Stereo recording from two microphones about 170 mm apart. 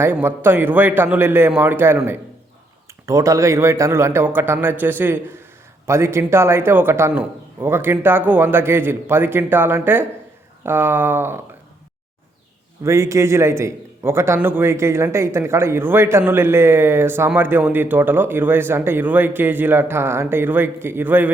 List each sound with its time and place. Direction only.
0.0 s a man's voice: 15° right (ahead or behind)
3.1 s a man's voice: 20° right (ahead or behind)
12.8 s a man's voice: 15° right (ahead or behind)